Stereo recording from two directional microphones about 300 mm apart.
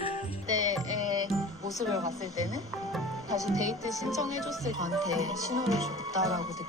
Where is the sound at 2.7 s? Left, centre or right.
Centre.